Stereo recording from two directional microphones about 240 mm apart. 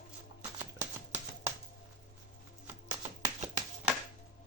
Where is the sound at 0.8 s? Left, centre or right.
Centre.